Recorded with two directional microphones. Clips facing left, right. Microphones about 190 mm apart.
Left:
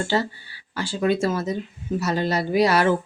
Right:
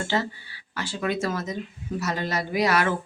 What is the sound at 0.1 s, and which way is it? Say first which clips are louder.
A woman's voice: left 3 dB; 35° left (ahead or behind).